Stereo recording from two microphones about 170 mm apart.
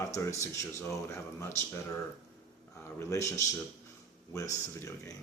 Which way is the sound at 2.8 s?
15° left (ahead or behind).